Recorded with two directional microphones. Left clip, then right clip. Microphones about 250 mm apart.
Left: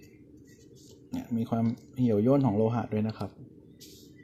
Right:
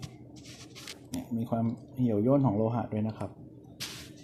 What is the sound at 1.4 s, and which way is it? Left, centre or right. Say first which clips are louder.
Speech: left 1 dB; left.